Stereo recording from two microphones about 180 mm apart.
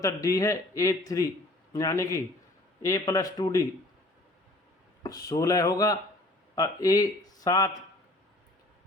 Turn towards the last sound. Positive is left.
turn(degrees=20)  # may be behind; listen again after turning